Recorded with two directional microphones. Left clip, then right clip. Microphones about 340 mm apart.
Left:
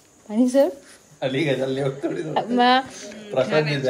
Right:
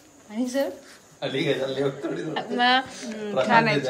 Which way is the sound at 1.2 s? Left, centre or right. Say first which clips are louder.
Left 3 dB; left.